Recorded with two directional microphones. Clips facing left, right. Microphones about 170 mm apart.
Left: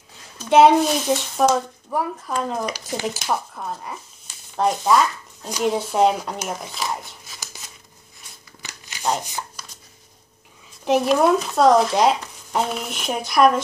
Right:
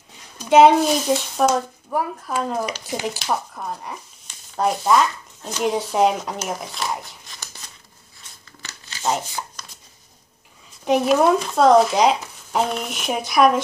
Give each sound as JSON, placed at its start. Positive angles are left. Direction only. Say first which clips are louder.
{"t": 0.4, "sound": "speech", "louder": "right 1 dB", "side_deg": 0}
{"t": 8.6, "sound": "crumpling", "louder": "even", "side_deg": 15}
{"t": 9.2, "sound": "a sound", "louder": "even", "side_deg": 15}
{"t": 10.9, "sound": "speech", "louder": "even", "side_deg": 0}